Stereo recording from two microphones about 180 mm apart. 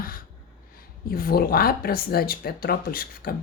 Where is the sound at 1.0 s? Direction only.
55° left (ahead or behind).